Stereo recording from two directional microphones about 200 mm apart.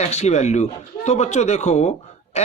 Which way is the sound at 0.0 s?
35° left (ahead or behind).